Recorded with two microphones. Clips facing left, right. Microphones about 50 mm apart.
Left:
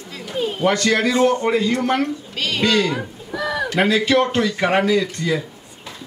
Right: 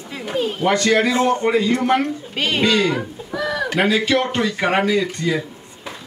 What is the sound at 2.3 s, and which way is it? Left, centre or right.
Speech, right.